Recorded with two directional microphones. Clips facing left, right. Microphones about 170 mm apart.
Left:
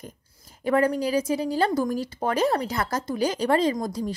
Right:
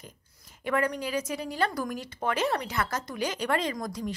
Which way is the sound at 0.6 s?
35° left (ahead or behind).